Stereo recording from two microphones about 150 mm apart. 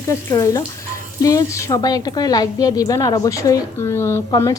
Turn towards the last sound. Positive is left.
turn(degrees=20)  # may be behind; listen again after turning